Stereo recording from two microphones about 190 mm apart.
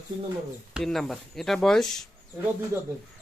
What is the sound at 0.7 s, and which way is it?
Speech, centre (ahead or behind).